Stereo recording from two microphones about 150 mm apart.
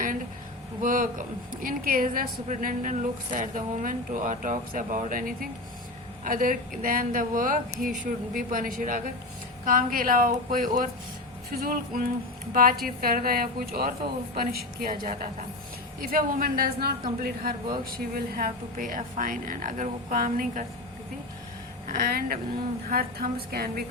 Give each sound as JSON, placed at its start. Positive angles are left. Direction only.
{"t": 0.8, "sound": "a woman's voice", "side_deg": -65}
{"t": 21.8, "sound": "a woman's voice", "side_deg": -85}